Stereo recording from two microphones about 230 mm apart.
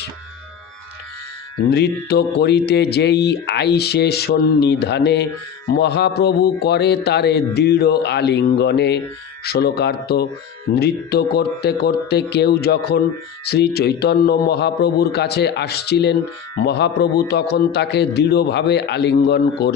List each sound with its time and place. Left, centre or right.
1.7 s speech: left